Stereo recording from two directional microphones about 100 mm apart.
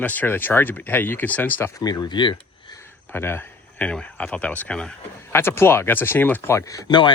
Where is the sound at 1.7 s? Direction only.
40° left (ahead or behind).